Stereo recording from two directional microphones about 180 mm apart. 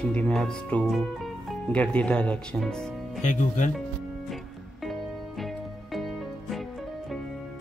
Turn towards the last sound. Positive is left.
turn(degrees=0)  # may be behind; listen again after turning